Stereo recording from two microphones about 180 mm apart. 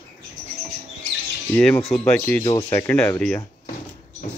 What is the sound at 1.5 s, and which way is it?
Speech, 5° left (ahead or behind).